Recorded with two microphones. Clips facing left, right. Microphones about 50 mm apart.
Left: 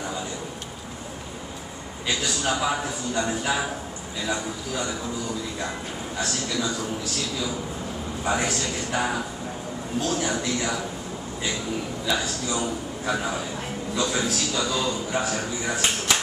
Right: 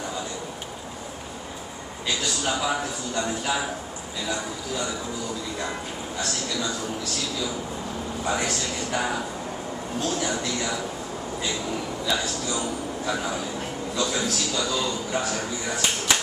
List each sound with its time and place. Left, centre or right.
2.0 s a man's voice: centre
8.3 s a man's voice: centre
12.1 s a man's voice: centre